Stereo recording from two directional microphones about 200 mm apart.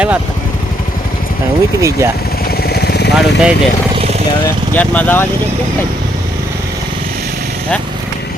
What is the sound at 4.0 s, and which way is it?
Vehicle, 30° right (ahead or behind).